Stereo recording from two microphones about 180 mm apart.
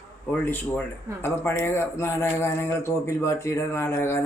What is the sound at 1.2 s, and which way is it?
Speech, 15° left (ahead or behind).